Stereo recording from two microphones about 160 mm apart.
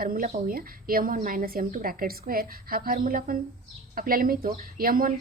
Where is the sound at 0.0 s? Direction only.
65° right (ahead or behind).